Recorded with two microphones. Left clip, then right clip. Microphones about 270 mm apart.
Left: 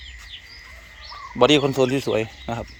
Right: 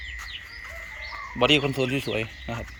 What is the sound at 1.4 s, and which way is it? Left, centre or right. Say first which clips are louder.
Speech: left 5 dB; left.